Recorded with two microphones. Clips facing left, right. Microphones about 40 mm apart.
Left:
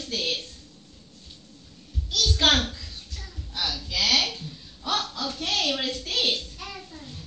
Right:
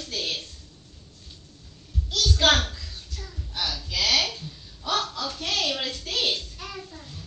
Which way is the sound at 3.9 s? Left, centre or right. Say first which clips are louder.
Even; left.